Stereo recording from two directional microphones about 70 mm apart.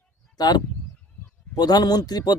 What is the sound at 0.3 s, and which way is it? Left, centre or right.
A man's voice, left.